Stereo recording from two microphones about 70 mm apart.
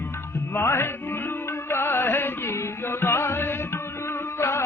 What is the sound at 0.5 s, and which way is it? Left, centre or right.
Music, left.